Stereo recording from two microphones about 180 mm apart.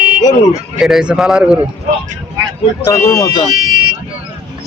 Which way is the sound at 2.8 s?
15° left (ahead or behind).